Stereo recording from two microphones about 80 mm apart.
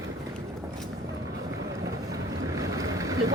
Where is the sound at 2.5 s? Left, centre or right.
Right.